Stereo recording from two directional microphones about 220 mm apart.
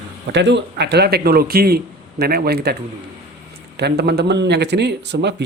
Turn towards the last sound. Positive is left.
turn(degrees=-50)  # may be behind; listen again after turning